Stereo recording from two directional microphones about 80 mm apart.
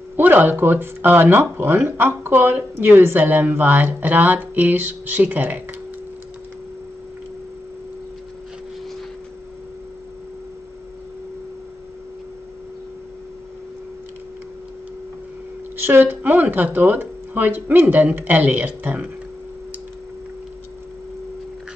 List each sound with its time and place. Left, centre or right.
0.1 s speech: right
15.8 s speech: right